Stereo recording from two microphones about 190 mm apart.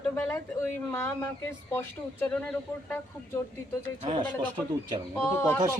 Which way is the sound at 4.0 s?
25° right (ahead or behind).